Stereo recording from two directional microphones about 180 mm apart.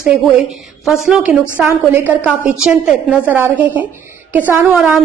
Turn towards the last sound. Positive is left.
turn(degrees=-5)  # may be behind; listen again after turning